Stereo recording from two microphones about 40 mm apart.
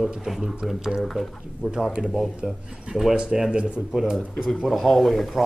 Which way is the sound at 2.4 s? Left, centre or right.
Centre.